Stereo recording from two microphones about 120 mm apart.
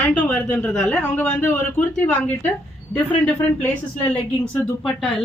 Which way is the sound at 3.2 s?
15° left (ahead or behind).